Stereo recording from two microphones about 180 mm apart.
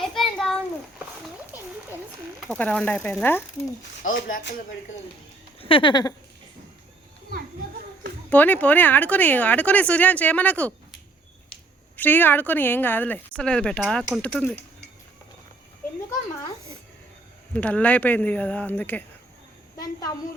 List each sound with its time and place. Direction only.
0.0 s a sound: centre (ahead or behind)
2.5 s speech: 5° left (ahead or behind)
5.5 s speech: 30° left (ahead or behind)
8.3 s speech: 10° left (ahead or behind)
11.9 s speech: 10° left (ahead or behind)
17.5 s speech: 10° left (ahead or behind)
19.7 s a woman's voice: 20° left (ahead or behind)